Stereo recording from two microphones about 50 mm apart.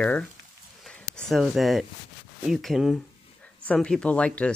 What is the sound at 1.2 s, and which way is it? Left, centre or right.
Speech, centre.